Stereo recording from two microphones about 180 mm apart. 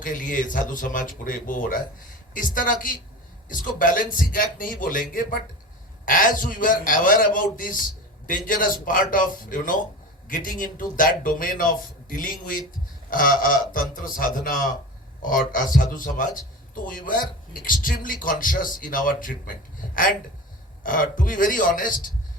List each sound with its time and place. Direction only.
0.0 s a man's voice: 45° left (ahead or behind)